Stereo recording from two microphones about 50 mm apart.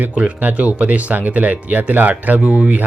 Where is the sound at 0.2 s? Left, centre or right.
Right.